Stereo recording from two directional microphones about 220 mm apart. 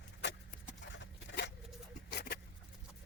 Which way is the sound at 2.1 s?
45° left (ahead or behind).